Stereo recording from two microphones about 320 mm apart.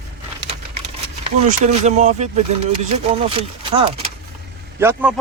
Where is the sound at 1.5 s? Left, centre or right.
Right.